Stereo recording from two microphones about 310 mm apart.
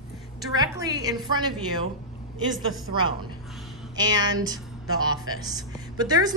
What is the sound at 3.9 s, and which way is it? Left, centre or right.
A woman's voice, centre.